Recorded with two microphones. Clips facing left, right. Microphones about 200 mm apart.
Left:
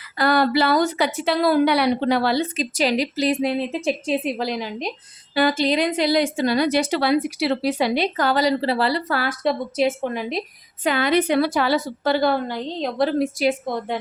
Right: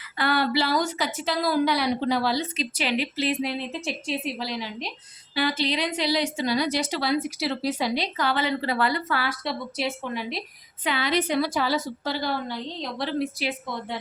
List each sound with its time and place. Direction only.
0.2 s a woman's voice: 40° left (ahead or behind)